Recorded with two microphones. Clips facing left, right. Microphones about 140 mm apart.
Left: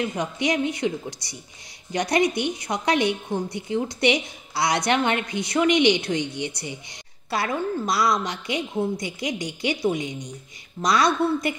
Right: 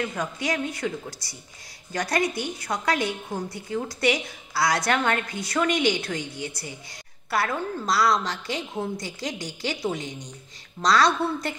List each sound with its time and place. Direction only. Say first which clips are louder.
0.0 s a woman's voice: left 3 dB; 20° left (ahead or behind)